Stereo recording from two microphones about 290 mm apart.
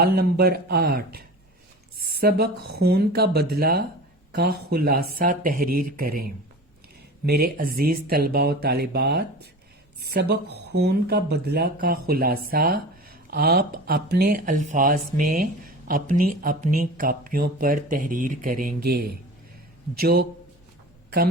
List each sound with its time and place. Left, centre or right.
0.0 s speech: right